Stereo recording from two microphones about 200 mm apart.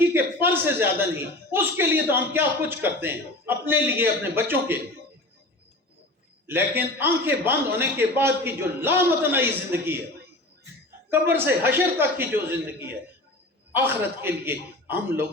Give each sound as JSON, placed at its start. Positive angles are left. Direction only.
{"t": 0.0, "sound": "a man's voice", "side_deg": -10}
{"t": 6.5, "sound": "a man's voice", "side_deg": -10}
{"t": 11.1, "sound": "a man's voice", "side_deg": -10}